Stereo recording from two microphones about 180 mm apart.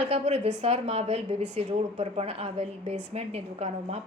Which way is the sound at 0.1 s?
35° right (ahead or behind).